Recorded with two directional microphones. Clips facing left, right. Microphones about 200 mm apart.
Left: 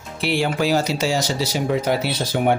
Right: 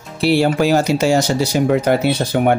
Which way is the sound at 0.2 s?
40° right (ahead or behind).